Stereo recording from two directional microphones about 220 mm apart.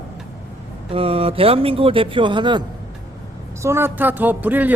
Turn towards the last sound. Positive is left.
turn(degrees=-10)  # may be behind; listen again after turning